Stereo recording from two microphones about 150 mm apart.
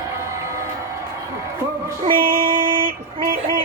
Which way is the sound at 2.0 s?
70° right (ahead or behind).